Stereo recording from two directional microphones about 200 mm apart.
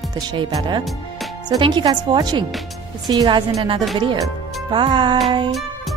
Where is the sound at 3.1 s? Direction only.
20° right (ahead or behind).